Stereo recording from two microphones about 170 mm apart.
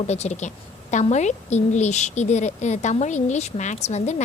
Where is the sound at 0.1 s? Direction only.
40° left (ahead or behind).